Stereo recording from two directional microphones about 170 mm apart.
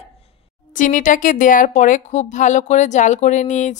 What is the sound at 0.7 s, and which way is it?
A woman's voice, 50° left (ahead or behind).